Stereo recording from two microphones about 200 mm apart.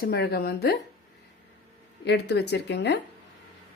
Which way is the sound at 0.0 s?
50° left (ahead or behind).